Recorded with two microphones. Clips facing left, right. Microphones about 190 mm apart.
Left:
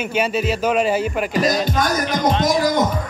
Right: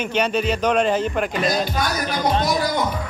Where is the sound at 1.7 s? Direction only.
45° left (ahead or behind).